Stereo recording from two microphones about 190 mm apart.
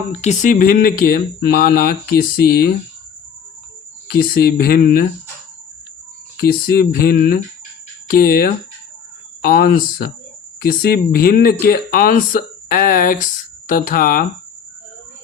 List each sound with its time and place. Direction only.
0.1 s speech: 35° left (ahead or behind); by 2.7 s 55° left (ahead or behind)
4.1 s speech: 50° left (ahead or behind)
6.3 s speech: 50° left (ahead or behind)